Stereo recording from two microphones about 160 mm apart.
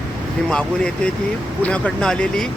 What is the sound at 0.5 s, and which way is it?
Speech, 5° left (ahead or behind).